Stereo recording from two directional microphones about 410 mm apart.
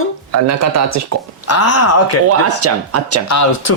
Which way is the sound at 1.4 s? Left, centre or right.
Left.